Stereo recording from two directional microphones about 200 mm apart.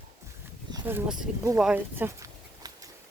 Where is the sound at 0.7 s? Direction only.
15° right (ahead or behind).